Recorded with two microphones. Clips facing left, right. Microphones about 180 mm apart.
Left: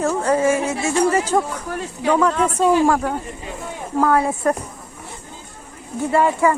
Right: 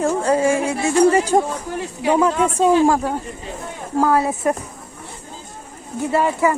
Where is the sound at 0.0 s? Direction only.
30° right (ahead or behind).